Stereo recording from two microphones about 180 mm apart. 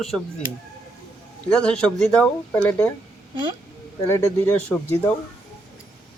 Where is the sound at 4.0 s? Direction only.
15° left (ahead or behind).